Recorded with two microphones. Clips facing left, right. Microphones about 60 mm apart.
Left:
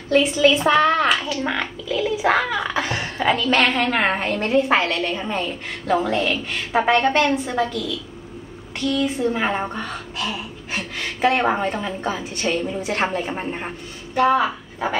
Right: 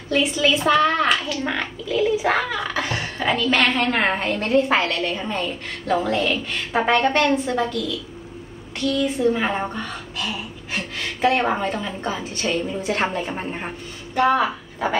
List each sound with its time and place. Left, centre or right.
0.5 s a woman's voice: left
0.9 s a sound: centre
3.3 s a woman's voice: centre
8.7 s a woman's voice: centre